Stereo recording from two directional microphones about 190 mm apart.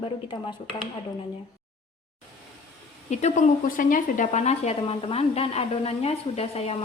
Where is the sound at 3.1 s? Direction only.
40° left (ahead or behind).